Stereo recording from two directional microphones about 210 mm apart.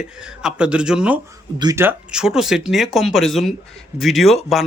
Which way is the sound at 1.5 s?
15° right (ahead or behind).